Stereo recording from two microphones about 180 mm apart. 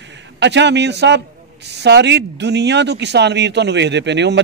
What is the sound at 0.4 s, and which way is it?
A man's voice, 75° right (ahead or behind).